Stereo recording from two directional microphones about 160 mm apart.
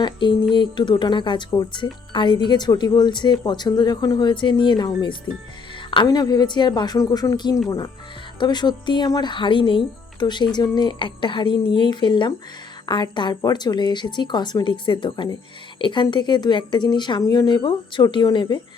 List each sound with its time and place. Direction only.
0.0 s speech: 30° left (ahead or behind)